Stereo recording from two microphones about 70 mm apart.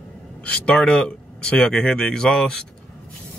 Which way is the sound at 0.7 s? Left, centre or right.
Centre.